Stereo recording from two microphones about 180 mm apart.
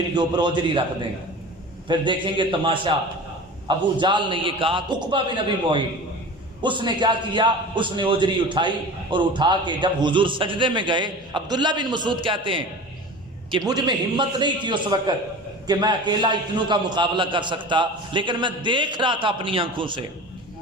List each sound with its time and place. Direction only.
0.1 s a man's voice: 25° right (ahead or behind)
1.9 s a man's voice: 25° right (ahead or behind)
6.6 s a man's voice: 25° right (ahead or behind)